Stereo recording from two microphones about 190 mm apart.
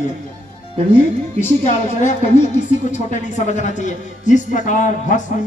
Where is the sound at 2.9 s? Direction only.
40° left (ahead or behind).